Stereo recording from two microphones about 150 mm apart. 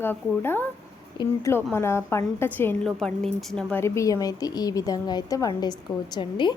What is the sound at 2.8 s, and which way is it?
A woman's voice, 5° left (ahead or behind).